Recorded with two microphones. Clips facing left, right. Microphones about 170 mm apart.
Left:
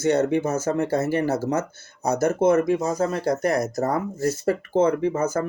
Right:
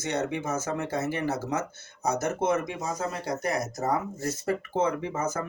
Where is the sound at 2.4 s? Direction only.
55° left (ahead or behind).